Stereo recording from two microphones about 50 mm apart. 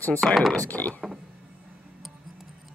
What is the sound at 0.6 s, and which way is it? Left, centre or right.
Speech, left.